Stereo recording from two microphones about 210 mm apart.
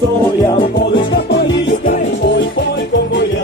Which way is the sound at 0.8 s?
55° left (ahead or behind).